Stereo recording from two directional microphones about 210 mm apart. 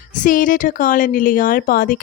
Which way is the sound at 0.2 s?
40° left (ahead or behind).